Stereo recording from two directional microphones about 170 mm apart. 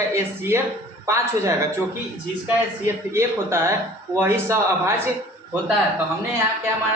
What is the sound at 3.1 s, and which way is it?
Speech, 15° right (ahead or behind).